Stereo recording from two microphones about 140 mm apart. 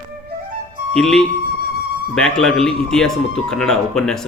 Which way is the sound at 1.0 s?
5° left (ahead or behind).